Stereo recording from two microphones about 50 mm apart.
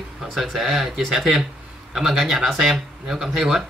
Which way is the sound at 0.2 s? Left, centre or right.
Centre.